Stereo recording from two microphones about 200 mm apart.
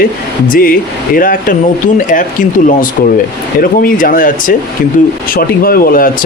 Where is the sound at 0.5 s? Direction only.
45° left (ahead or behind).